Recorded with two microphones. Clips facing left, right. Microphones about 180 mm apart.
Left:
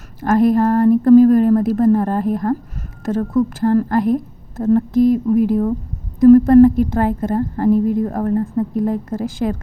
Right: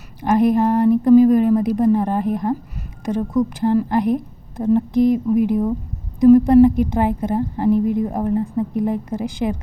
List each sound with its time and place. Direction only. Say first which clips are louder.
0.2 s a woman's voice: left 2 dB; 20° right (ahead or behind)